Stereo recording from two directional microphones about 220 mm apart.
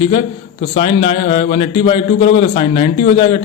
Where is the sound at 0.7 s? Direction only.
25° left (ahead or behind).